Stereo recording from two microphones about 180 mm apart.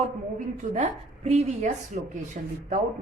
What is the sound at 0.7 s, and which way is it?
Speech, 40° right (ahead or behind).